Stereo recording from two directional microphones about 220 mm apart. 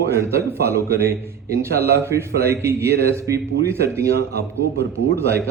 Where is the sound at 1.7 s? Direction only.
45° right (ahead or behind).